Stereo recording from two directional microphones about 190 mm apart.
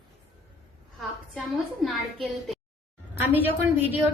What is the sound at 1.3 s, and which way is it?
A woman's voice, centre (ahead or behind).